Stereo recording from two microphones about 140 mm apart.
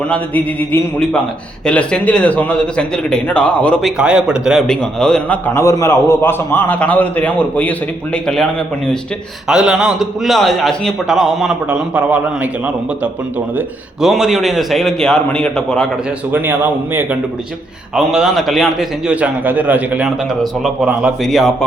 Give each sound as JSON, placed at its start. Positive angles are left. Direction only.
{"t": 0.1, "sound": "speech", "side_deg": 10}
{"t": 4.6, "sound": "a man's voice", "side_deg": 5}
{"t": 5.5, "sound": "speech", "side_deg": 20}
{"t": 9.5, "sound": "a man's voice", "side_deg": -5}
{"t": 16.3, "sound": "a man's voice", "side_deg": -15}
{"t": 17.9, "sound": "a man's voice", "side_deg": 0}